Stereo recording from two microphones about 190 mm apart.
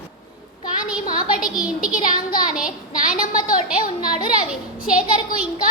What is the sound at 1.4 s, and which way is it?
Speech, 5° right (ahead or behind).